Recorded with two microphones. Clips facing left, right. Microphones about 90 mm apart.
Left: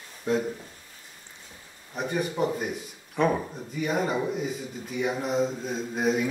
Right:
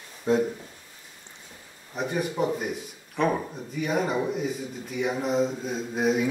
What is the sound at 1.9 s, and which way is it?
A man's voice, centre (ahead or behind).